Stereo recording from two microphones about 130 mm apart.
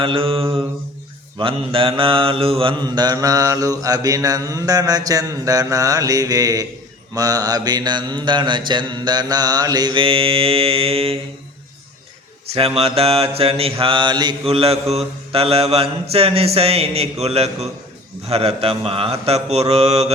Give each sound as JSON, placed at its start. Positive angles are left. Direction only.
{"t": 0.0, "sound": "mantra", "side_deg": -45}
{"t": 12.5, "sound": "mantra", "side_deg": -50}
{"t": 14.4, "sound": "mantra", "side_deg": -50}